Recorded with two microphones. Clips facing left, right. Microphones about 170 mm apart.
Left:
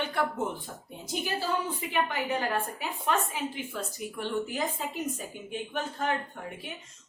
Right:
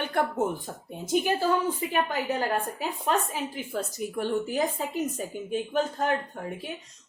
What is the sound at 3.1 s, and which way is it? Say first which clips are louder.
A woman's voice: right 1 dB; 40° right (ahead or behind).